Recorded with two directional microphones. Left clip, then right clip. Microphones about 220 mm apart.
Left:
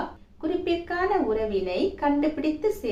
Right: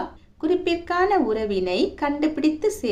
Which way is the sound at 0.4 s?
50° right (ahead or behind).